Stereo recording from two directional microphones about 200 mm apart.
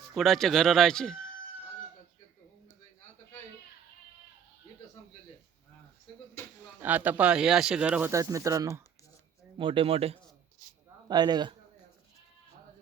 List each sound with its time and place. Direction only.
0.1 s speech: centre (ahead or behind)
6.7 s a man's voice: 10° right (ahead or behind)